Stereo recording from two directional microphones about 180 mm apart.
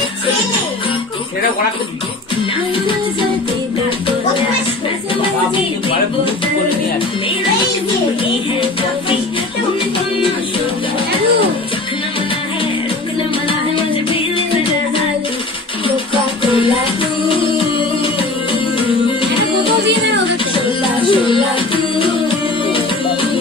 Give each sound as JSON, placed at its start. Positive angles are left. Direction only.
{"t": 21.1, "sound": "music", "side_deg": 30}